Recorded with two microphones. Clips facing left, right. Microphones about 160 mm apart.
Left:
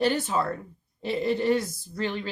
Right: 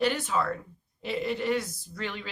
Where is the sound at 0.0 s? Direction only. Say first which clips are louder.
Left 2 dB; 30° left (ahead or behind).